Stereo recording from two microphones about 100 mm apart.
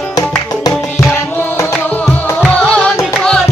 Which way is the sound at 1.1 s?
25° left (ahead or behind).